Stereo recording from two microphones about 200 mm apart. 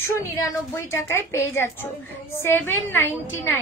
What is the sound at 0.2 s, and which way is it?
A woman's voice, 15° left (ahead or behind).